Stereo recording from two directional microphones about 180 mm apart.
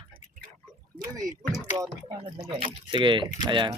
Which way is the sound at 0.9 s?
5° left (ahead or behind).